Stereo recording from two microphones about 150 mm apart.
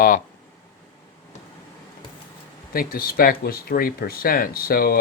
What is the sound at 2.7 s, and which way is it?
Speech, 80° left.